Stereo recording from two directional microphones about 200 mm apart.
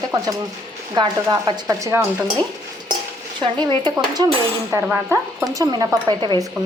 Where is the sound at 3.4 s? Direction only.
20° right (ahead or behind).